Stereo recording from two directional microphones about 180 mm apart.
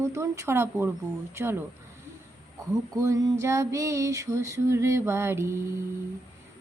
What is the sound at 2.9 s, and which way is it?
Speech, 20° right (ahead or behind).